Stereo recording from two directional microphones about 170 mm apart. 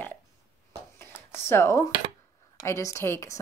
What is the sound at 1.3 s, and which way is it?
A woman's voice, 15° left (ahead or behind).